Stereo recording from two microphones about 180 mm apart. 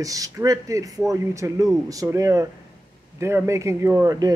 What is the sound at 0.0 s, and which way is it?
Speech, 20° right (ahead or behind).